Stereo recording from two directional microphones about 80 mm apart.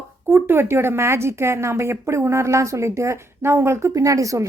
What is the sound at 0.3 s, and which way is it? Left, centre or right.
A woman's voice, right.